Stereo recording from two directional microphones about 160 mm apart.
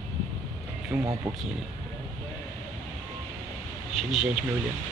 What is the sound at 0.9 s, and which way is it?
Speech, 25° right (ahead or behind).